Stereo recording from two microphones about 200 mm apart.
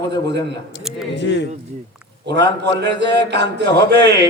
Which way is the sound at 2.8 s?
60° right (ahead or behind).